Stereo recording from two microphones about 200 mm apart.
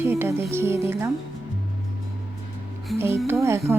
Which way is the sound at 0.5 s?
15° right (ahead or behind).